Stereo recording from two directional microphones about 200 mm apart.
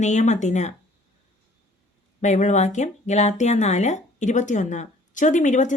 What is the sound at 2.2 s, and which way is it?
Speech, 35° left (ahead or behind).